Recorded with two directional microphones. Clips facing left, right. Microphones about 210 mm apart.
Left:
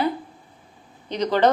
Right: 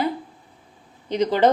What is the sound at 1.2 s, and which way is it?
Speech, 10° right (ahead or behind).